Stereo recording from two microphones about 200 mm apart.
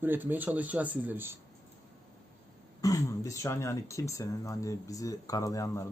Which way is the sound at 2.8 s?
15° left (ahead or behind).